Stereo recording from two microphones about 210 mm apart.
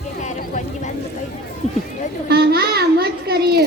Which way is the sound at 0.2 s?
35° left (ahead or behind).